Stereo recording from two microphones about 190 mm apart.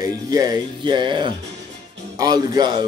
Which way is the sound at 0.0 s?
20° right (ahead or behind).